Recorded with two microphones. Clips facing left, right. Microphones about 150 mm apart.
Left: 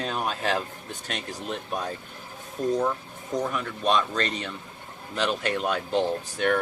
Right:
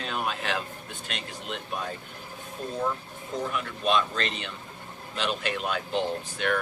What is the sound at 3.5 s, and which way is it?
A man's voice, 40° left (ahead or behind).